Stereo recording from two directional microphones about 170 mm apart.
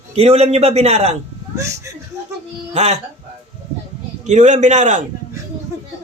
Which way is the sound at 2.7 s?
40° right (ahead or behind).